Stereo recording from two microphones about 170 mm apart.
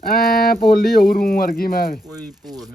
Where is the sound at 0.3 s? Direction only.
65° left (ahead or behind).